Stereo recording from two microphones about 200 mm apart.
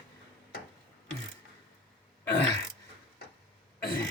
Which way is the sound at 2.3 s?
60° left (ahead or behind).